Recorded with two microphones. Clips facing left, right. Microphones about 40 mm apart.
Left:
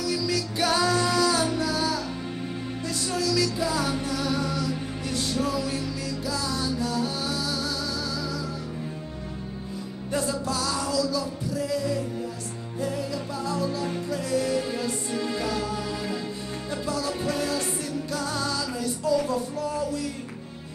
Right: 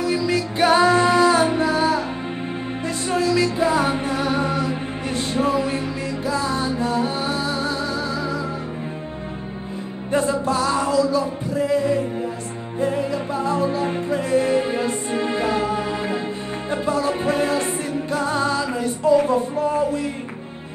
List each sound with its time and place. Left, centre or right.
0.0 s music: right
3.1 s music: right
10.1 s music: right